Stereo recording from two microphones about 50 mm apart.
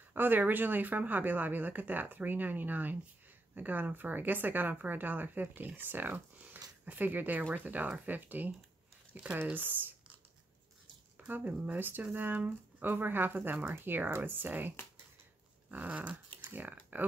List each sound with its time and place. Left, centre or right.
0.1 s speech: right
9.5 s speech: right
11.2 s speech: right
15.7 s speech: right